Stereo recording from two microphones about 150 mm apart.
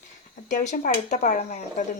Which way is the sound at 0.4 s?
55° left (ahead or behind).